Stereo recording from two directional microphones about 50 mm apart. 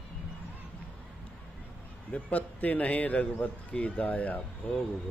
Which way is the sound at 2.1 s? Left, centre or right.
Left.